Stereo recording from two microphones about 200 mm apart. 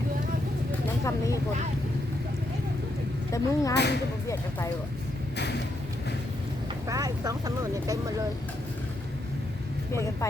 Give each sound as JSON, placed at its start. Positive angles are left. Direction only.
{"t": 1.0, "sound": "speech", "side_deg": 15}
{"t": 3.3, "sound": "speech", "side_deg": 15}
{"t": 3.8, "sound": "speech", "side_deg": 55}
{"t": 6.8, "sound": "speech", "side_deg": -15}
{"t": 9.9, "sound": "speech", "side_deg": 15}